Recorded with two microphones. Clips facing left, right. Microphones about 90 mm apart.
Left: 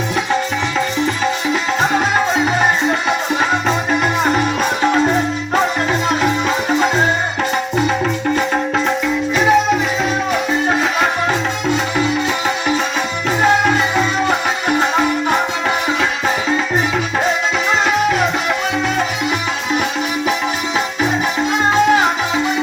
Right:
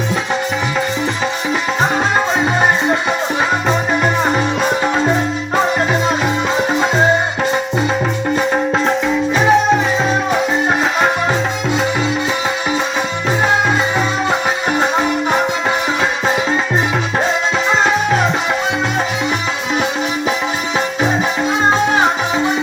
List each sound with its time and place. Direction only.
6.7 s music: 20° right (ahead or behind)
9.3 s music: 30° right (ahead or behind)
14.8 s music: 15° right (ahead or behind)
21.7 s music: 25° right (ahead or behind)